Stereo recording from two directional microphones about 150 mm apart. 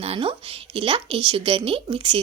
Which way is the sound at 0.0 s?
40° right (ahead or behind).